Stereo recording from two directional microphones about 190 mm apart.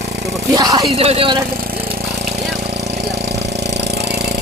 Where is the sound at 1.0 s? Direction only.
30° right (ahead or behind).